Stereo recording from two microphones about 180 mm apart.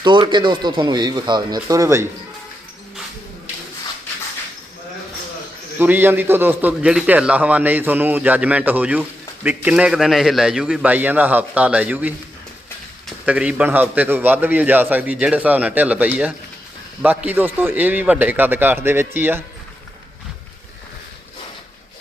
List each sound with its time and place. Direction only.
0.0 s speech: 25° right (ahead or behind)
5.8 s a man's voice: 10° right (ahead or behind)